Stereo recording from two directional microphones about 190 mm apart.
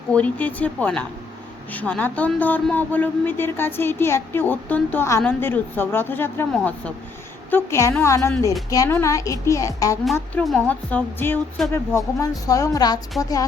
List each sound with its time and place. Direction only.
0.1 s speech: 5° left (ahead or behind)
10.4 s speech: 5° left (ahead or behind); by 13.4 s 20° left (ahead or behind)